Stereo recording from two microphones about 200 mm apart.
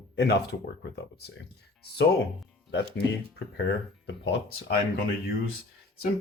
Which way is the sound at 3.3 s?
65° left (ahead or behind).